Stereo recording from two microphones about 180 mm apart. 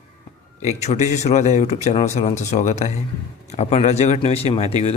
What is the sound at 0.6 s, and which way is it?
Speech, 40° left (ahead or behind).